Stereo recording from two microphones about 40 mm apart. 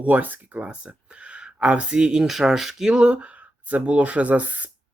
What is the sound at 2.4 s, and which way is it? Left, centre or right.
Speech, centre.